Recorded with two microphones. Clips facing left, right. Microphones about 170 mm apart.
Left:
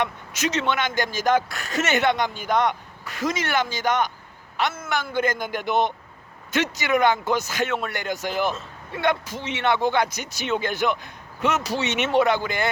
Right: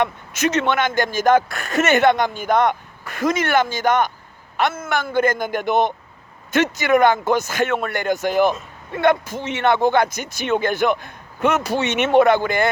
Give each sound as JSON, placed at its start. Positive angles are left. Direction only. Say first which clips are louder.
{"t": 0.0, "sound": "a man's voice", "louder": "right 5 dB", "side_deg": -55}